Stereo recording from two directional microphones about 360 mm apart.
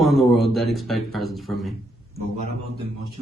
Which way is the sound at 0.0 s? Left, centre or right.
Centre.